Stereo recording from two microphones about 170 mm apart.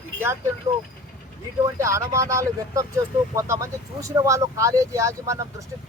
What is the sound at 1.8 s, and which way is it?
Speech, 15° right (ahead or behind).